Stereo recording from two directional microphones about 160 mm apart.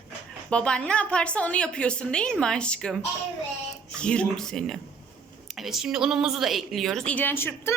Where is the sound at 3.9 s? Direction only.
5° left (ahead or behind).